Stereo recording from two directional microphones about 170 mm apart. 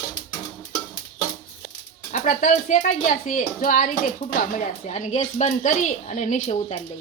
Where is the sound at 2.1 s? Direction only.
50° left (ahead or behind).